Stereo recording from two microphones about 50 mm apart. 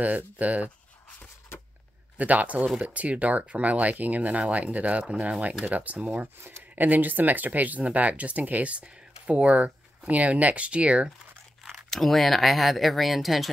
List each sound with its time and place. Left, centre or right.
0.0 s speech: right
2.1 s speech: right
5.0 s speech: centre
5.7 s speech: right
11.9 s speech: centre